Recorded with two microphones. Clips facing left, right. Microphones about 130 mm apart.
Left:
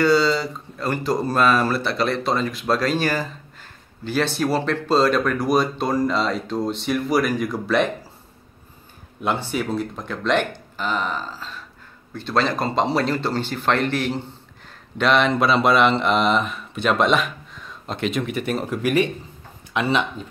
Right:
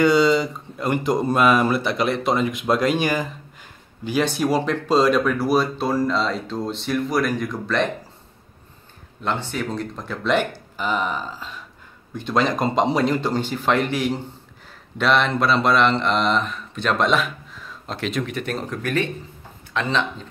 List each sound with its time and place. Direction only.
0.0 s speech: 20° right (ahead or behind); by 7.9 s 5° left (ahead or behind)
9.2 s speech: 10° left (ahead or behind); by 14.2 s 10° right (ahead or behind)
15.0 s speech: centre (ahead or behind)